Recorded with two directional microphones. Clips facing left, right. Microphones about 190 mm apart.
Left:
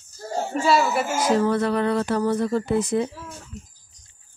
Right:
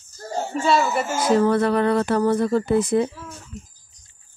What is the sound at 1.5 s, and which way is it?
Speech, 60° right (ahead or behind).